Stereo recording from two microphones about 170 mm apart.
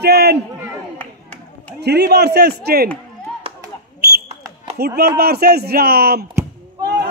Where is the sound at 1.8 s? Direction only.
75° right (ahead or behind).